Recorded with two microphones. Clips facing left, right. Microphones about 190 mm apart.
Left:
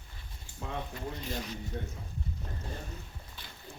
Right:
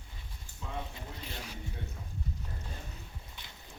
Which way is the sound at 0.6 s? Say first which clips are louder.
Left 4 dB; 60° left (ahead or behind).